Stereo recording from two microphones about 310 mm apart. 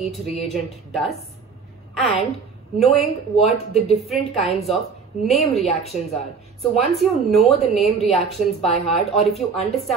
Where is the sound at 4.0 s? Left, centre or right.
Centre.